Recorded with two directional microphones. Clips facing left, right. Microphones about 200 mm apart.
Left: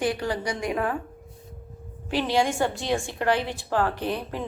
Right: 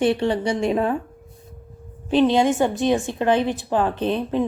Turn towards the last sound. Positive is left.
turn(degrees=-20)  # may be behind; listen again after turning